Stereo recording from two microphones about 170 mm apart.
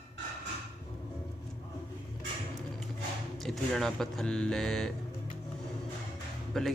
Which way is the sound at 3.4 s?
Centre (ahead or behind).